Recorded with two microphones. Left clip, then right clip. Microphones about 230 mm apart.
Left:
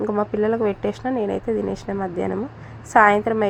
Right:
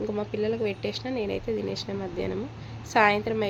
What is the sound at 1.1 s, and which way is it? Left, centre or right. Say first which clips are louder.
A woman's voice: left 7 dB; centre.